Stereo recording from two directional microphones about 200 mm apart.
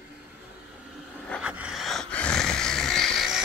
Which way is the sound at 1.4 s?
5° right (ahead or behind).